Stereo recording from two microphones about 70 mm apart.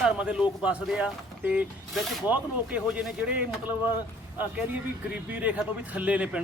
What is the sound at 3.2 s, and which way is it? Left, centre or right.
Speech, centre.